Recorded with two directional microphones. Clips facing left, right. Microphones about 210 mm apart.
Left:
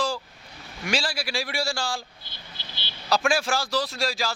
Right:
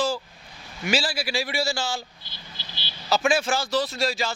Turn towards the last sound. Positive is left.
turn(degrees=0)  # may be behind; listen again after turning